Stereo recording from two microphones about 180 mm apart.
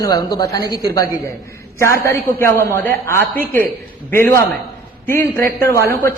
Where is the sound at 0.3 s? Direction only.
20° left (ahead or behind).